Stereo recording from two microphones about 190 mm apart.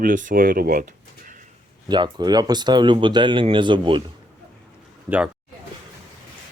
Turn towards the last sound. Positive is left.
turn(degrees=-10)  # may be behind; listen again after turning